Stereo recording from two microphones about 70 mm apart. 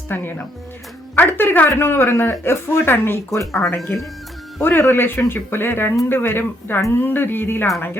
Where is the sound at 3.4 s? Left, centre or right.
Centre.